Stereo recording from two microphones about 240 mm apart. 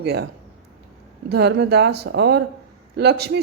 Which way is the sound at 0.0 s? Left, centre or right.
Right.